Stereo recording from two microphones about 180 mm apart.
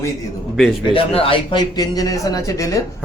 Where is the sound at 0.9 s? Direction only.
30° left (ahead or behind).